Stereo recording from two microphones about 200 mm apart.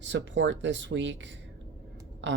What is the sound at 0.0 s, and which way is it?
Speech, 65° right (ahead or behind).